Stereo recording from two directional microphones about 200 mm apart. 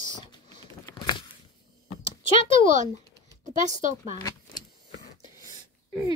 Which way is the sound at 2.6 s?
35° right (ahead or behind).